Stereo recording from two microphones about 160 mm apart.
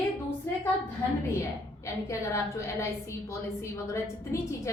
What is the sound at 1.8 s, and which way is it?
A woman's voice, 20° left (ahead or behind).